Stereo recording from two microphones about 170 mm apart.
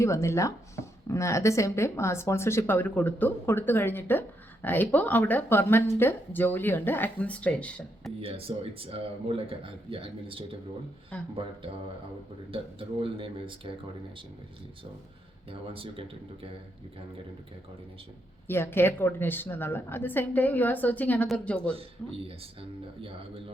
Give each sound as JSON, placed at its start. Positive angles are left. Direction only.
{"t": 0.0, "sound": "speech", "side_deg": 15}
{"t": 8.2, "sound": "speech", "side_deg": -35}
{"t": 13.0, "sound": "speech", "side_deg": -30}
{"t": 15.4, "sound": "speech", "side_deg": -30}
{"t": 18.4, "sound": "speech", "side_deg": 15}